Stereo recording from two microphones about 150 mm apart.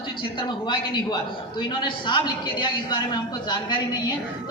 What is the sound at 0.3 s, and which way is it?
A man's voice, 30° left (ahead or behind).